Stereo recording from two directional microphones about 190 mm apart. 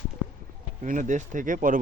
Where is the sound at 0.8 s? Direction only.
40° right (ahead or behind).